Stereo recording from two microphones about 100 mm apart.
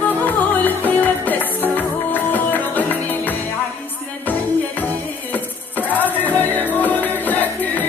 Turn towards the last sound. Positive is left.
turn(degrees=15)  # may be behind; listen again after turning